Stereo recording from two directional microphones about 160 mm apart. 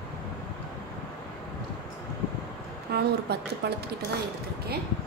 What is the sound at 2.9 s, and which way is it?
Speech, 90° right.